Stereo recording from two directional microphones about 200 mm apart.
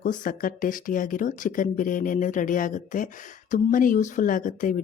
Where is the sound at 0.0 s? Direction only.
40° left (ahead or behind).